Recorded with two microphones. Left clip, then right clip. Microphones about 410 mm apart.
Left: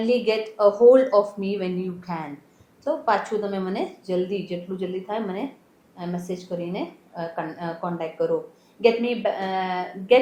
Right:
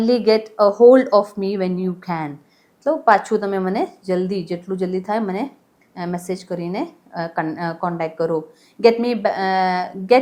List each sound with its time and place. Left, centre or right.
0.0 s a woman's voice: right